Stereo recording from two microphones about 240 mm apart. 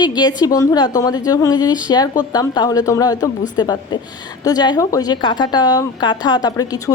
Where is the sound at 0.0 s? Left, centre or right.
Centre.